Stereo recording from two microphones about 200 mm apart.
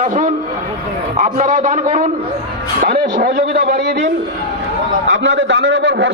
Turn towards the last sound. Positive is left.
turn(degrees=-65)  # may be behind; listen again after turning